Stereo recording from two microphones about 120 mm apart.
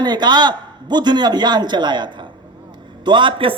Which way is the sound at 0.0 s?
40° right (ahead or behind).